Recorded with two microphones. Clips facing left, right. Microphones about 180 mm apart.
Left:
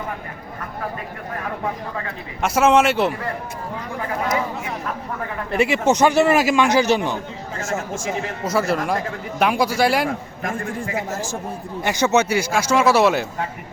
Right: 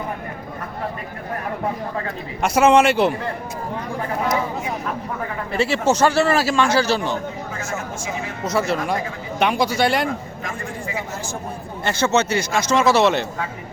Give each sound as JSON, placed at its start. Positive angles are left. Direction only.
{"t": 2.4, "sound": "a man's voice", "side_deg": 0}
{"t": 5.5, "sound": "a man's voice", "side_deg": 15}
{"t": 8.4, "sound": "a man's voice", "side_deg": 5}
{"t": 10.1, "sound": "a man's voice", "side_deg": 50}
{"t": 11.9, "sound": "a man's voice", "side_deg": 15}